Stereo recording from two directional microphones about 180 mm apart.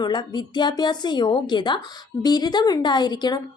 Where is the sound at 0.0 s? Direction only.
25° left (ahead or behind).